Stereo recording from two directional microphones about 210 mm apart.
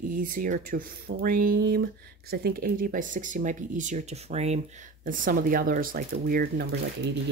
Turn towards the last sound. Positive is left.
turn(degrees=-50)  # may be behind; listen again after turning